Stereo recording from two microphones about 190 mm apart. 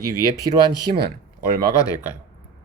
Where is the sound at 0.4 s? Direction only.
25° right (ahead or behind).